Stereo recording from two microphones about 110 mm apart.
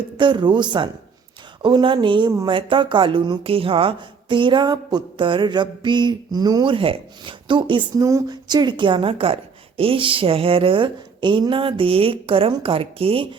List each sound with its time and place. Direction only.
0.2 s a woman's voice: 45° right (ahead or behind)
6.7 s a woman's voice: 50° right (ahead or behind)
8.0 s a woman's voice: 35° right (ahead or behind); by 13.2 s 60° right (ahead or behind)